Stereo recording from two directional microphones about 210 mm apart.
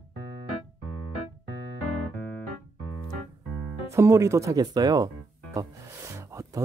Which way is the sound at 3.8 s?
15° right (ahead or behind).